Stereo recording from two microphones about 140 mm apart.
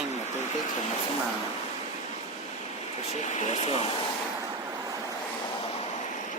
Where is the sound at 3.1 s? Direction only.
55° left (ahead or behind).